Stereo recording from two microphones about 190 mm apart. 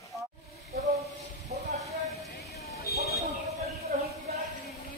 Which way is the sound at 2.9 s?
55° left (ahead or behind).